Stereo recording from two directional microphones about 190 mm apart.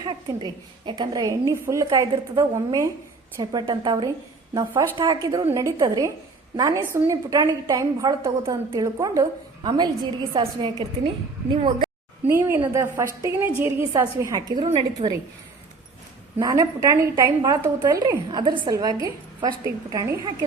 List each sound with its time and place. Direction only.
0.0 s a woman's voice: 20° right (ahead or behind)
12.3 s a woman's voice: 15° right (ahead or behind)
16.4 s a woman's voice: 20° right (ahead or behind)